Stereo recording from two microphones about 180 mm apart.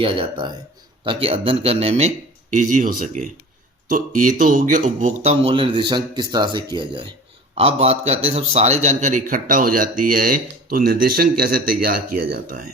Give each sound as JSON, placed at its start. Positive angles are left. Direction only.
{"t": 0.0, "sound": "a man's voice", "side_deg": -30}